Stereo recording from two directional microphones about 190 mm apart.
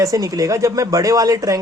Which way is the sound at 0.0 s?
20° right (ahead or behind).